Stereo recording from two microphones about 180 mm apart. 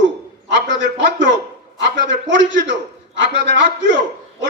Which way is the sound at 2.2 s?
85° right.